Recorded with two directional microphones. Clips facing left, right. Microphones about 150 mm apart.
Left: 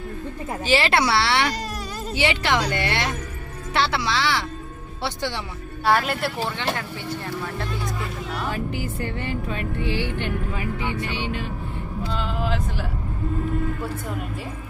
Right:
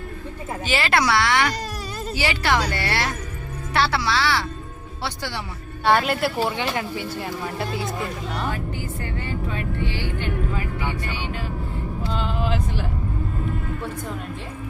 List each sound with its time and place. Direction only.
0.6 s speech: 30° left (ahead or behind)
5.8 s speech: centre (ahead or behind)
6.7 s speech: 10° right (ahead or behind)
8.7 s speech: 20° left (ahead or behind)
12.1 s vehicle: centre (ahead or behind)